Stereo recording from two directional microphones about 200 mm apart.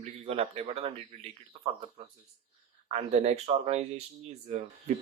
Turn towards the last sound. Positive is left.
turn(degrees=-35)  # may be behind; listen again after turning